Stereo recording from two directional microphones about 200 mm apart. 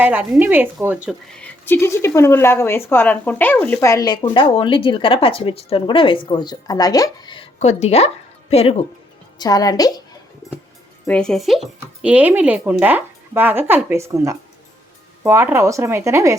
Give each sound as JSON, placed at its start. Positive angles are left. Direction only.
{"t": 0.0, "sound": "speech", "side_deg": -10}
{"t": 1.0, "sound": "speech", "side_deg": 5}
{"t": 7.6, "sound": "a woman's voice", "side_deg": 35}
{"t": 9.4, "sound": "a woman's voice", "side_deg": 20}
{"t": 11.0, "sound": "speech", "side_deg": 5}